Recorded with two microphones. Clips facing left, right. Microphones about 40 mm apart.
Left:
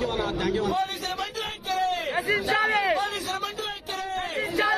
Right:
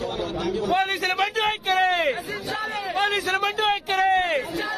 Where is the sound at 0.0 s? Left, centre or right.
Left.